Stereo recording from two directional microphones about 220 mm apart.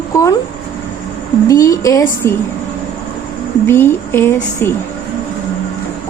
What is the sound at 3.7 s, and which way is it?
Speech, 10° left (ahead or behind).